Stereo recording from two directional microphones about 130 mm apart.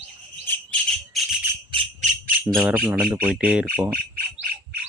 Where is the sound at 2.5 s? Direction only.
5° right (ahead or behind).